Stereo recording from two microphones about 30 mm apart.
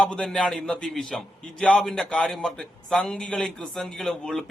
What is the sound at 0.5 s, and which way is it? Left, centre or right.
Speech, left.